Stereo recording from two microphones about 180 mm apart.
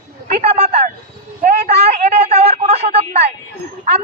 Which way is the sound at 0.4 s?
35° right (ahead or behind).